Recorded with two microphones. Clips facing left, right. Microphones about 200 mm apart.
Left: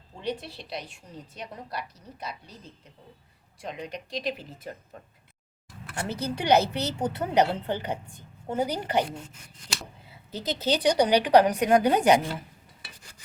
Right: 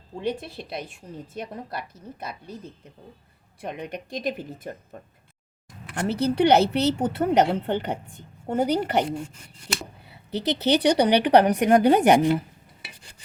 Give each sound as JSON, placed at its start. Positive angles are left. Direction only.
{"t": 0.2, "sound": "a woman's voice", "side_deg": -50}
{"t": 3.6, "sound": "a woman's voice", "side_deg": -60}
{"t": 5.9, "sound": "a woman's voice", "side_deg": -65}